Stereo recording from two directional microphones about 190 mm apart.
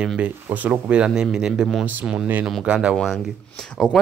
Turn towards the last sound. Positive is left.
turn(degrees=5)  # may be behind; listen again after turning